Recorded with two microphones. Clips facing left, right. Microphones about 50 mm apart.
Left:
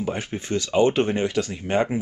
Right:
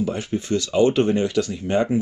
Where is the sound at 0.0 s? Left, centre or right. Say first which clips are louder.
Right 3 dB; left.